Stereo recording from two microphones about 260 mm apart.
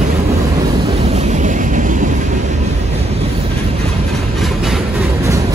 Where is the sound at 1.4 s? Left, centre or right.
Right.